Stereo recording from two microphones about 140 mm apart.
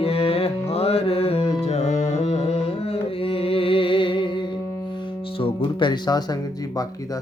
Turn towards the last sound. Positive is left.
turn(degrees=30)  # may be behind; listen again after turning